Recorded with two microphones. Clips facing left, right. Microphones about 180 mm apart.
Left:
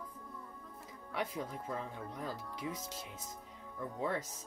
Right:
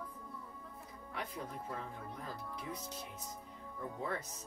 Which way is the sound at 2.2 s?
90° left.